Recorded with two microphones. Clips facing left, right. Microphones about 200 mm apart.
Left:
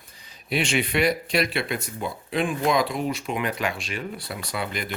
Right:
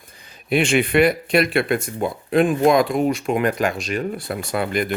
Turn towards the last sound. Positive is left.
turn(degrees=-50)  # may be behind; listen again after turning